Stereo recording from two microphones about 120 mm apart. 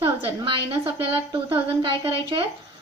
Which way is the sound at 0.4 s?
45° right (ahead or behind).